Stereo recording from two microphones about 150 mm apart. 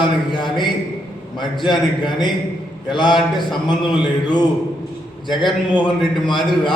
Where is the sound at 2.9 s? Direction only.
30° left (ahead or behind).